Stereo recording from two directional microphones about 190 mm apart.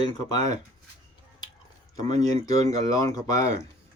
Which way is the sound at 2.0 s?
20° left (ahead or behind).